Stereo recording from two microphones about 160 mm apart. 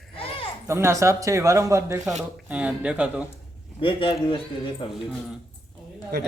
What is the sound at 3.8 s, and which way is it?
A man's voice, 35° left (ahead or behind).